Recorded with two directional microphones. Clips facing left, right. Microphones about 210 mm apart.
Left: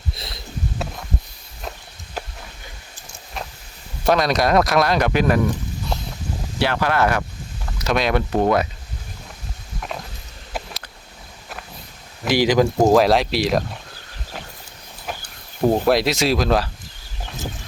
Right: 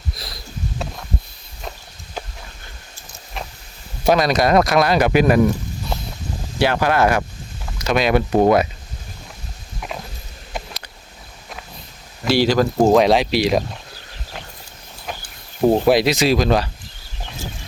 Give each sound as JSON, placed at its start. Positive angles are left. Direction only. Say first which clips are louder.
{"t": 0.1, "sound": "a sound", "louder": "even", "side_deg": 25}
{"t": 4.0, "sound": "speech", "louder": "right 2 dB", "side_deg": 0}
{"t": 6.6, "sound": "speech", "louder": "right 3 dB", "side_deg": -15}
{"t": 7.8, "sound": "speech", "louder": "right 3 dB", "side_deg": 0}
{"t": 8.3, "sound": "speech", "louder": "right 4 dB", "side_deg": -15}
{"t": 12.3, "sound": "speech", "louder": "even", "side_deg": 15}
{"t": 12.7, "sound": "speech", "louder": "right 3 dB", "side_deg": 0}
{"t": 15.6, "sound": "speech", "louder": "right 3 dB", "side_deg": -5}